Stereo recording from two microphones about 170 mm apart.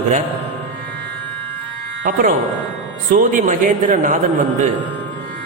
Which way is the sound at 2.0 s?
55° right (ahead or behind).